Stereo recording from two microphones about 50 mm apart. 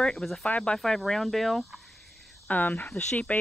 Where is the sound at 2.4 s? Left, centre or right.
Left.